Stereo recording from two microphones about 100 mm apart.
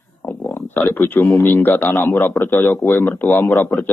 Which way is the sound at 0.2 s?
20° left (ahead or behind).